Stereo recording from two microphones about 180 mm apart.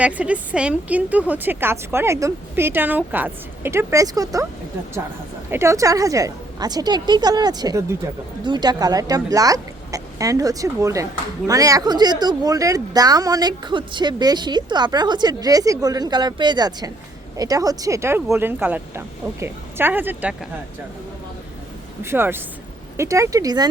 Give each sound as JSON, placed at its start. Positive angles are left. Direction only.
{"t": 0.0, "sound": "a woman's voice", "side_deg": -5}
{"t": 5.5, "sound": "a woman's voice", "side_deg": -15}
{"t": 22.0, "sound": "a woman's voice", "side_deg": -15}